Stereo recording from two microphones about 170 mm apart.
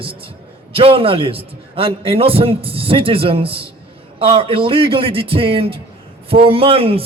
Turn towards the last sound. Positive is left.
turn(degrees=-35)  # may be behind; listen again after turning